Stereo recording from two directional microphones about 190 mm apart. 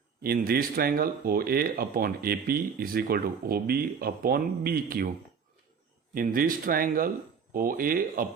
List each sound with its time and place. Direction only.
0.2 s speech: 50° right (ahead or behind)
6.1 s speech: 50° right (ahead or behind)